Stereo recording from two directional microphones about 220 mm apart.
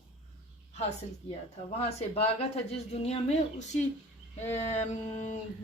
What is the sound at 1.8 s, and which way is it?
Speech, 25° left (ahead or behind).